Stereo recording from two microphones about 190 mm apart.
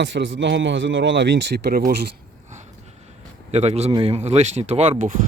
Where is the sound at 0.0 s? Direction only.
75° right (ahead or behind).